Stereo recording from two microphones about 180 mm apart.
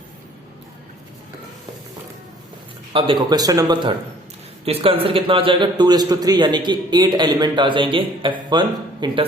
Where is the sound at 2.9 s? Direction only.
30° right (ahead or behind).